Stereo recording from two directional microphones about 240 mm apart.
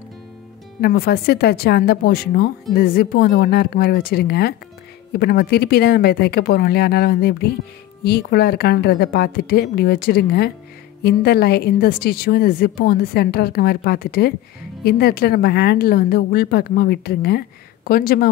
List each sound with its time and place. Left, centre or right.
0.7 s speech: left